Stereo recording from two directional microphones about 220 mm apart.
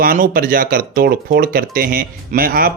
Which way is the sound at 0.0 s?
40° right (ahead or behind).